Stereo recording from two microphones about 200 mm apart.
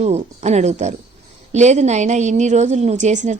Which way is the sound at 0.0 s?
35° right (ahead or behind).